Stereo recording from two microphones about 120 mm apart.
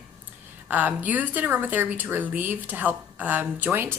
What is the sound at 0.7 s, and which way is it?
Speech, 15° right (ahead or behind).